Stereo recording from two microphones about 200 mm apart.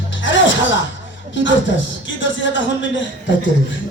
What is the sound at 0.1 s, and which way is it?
Music, 65° left (ahead or behind).